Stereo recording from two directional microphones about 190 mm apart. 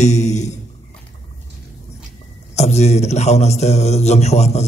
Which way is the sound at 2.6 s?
35° left (ahead or behind).